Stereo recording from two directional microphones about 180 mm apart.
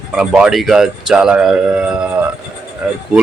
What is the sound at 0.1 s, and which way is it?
Speech, 5° right (ahead or behind).